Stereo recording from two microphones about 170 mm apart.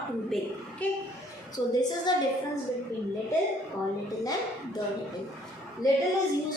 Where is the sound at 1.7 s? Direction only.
25° left (ahead or behind).